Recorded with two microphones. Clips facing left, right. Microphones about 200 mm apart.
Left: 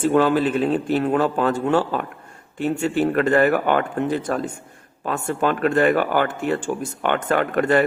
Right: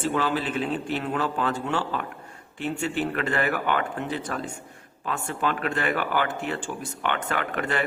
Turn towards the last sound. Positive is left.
turn(degrees=45)  # may be behind; listen again after turning